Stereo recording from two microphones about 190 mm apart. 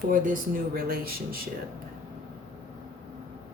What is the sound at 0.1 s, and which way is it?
Speech, 50° right (ahead or behind).